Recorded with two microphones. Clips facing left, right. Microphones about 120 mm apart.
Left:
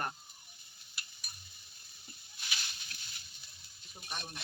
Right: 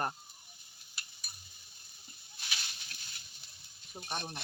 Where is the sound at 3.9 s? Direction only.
35° right (ahead or behind).